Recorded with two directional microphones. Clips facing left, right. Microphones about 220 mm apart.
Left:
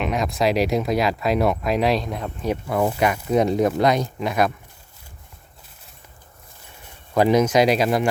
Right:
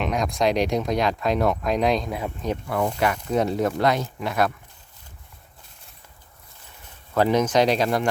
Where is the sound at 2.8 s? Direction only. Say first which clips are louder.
Left 2 dB; 10° left (ahead or behind).